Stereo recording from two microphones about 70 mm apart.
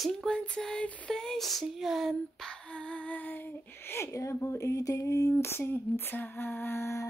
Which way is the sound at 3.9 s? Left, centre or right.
Left.